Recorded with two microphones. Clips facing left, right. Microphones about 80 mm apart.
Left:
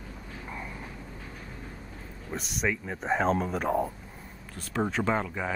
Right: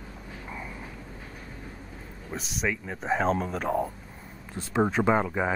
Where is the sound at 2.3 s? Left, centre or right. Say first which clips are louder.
Even; centre.